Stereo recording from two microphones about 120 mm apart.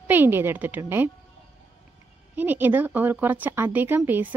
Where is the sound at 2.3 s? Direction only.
15° right (ahead or behind).